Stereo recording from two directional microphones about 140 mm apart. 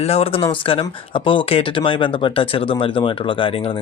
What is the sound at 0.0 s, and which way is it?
Speech, 45° left (ahead or behind).